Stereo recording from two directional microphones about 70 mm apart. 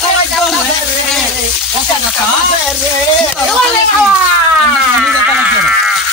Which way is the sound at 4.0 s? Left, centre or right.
Centre.